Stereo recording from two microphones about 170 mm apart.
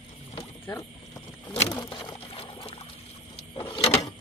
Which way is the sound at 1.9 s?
30° left (ahead or behind).